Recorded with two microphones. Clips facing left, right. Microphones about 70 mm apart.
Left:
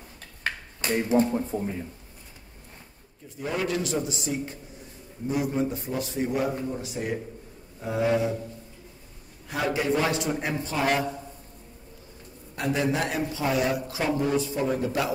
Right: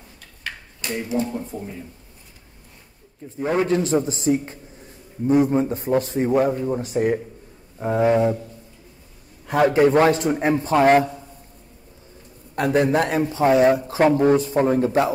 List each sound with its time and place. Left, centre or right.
0.4 s a sound: left
1.0 s speech: left
3.3 s a man's voice: right
9.5 s a man's voice: right
12.5 s a man's voice: right